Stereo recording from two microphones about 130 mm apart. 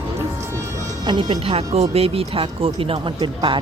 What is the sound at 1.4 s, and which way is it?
Speech, 50° right (ahead or behind).